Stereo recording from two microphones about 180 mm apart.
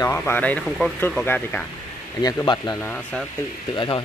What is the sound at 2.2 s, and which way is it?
Speech, 20° left (ahead or behind).